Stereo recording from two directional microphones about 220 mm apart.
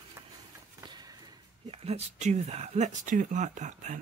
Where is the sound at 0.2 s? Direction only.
10° right (ahead or behind).